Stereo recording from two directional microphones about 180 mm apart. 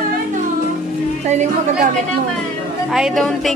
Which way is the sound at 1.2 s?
40° right (ahead or behind).